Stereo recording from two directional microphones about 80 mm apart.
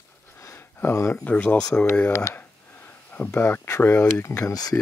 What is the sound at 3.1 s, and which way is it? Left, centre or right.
Speech, centre.